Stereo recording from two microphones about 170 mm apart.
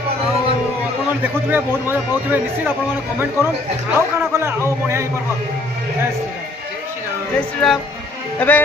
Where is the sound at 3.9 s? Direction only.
15° right (ahead or behind).